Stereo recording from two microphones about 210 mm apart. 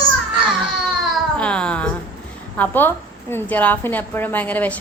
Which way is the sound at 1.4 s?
5° left (ahead or behind).